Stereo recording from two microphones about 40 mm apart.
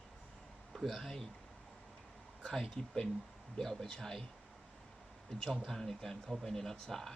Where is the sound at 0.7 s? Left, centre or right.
Centre.